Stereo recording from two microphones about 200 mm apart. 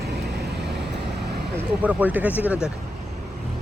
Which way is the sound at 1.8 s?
10° right (ahead or behind).